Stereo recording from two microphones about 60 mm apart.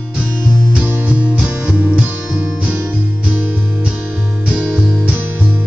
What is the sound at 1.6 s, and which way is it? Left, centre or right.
Music, right.